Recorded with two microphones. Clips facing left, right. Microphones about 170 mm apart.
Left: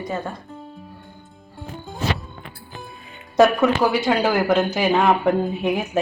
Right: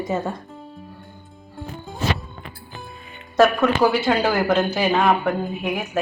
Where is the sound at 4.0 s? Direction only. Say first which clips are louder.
Even; 5° right (ahead or behind).